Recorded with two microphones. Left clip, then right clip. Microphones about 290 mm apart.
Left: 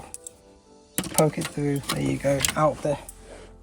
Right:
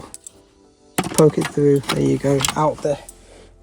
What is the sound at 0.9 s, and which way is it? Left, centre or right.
Music, centre.